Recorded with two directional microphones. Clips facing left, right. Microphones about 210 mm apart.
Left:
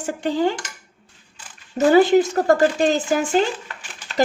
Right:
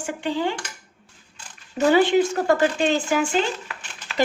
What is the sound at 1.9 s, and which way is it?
Speech, 40° left (ahead or behind).